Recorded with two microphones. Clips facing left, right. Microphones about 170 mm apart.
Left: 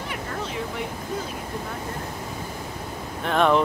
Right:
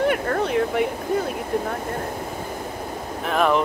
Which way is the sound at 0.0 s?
60° right (ahead or behind).